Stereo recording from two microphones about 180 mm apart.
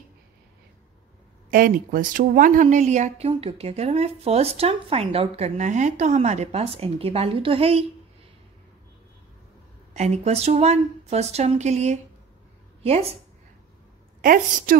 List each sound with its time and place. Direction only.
1.5 s a woman's voice: 50° right (ahead or behind); by 7.8 s 35° right (ahead or behind)
9.9 s a woman's voice: 40° right (ahead or behind)
14.2 s a woman's voice: 50° right (ahead or behind)